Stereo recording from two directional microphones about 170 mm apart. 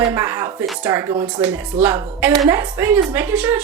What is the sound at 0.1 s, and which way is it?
A woman's voice, 15° right (ahead or behind).